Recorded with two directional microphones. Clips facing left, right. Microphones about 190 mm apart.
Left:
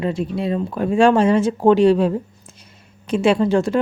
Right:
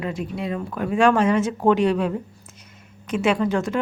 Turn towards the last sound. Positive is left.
turn(degrees=30)  # may be behind; listen again after turning